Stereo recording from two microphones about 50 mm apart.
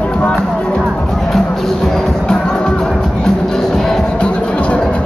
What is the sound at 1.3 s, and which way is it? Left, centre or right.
Music, centre.